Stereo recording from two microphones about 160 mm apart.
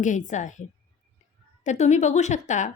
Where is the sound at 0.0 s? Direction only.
50° left (ahead or behind).